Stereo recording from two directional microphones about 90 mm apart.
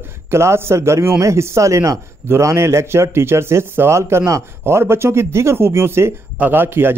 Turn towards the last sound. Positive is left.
turn(degrees=-25)  # may be behind; listen again after turning